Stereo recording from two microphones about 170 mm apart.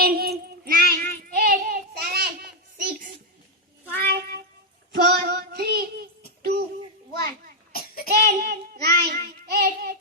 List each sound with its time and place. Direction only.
0.0 s child singing: 65° right (ahead or behind)
4.1 s child singing: 70° right (ahead or behind)
7.7 s child singing: 60° left (ahead or behind)
8.1 s child singing: 60° right (ahead or behind)